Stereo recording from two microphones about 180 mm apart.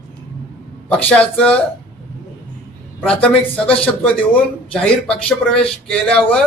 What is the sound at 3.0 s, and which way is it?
Speech, 5° left (ahead or behind).